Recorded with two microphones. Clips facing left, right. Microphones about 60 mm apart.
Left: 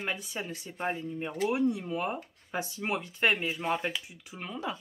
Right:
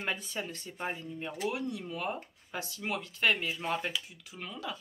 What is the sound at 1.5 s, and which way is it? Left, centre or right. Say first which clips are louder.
Speech: left 7 dB; left.